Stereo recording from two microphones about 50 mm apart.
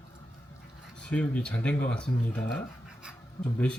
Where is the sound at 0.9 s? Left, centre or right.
Left.